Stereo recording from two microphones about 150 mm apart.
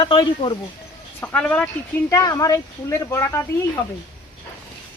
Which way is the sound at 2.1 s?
25° left (ahead or behind).